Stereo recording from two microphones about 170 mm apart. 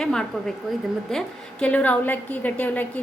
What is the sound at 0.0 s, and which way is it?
A woman's voice, 5° left (ahead or behind).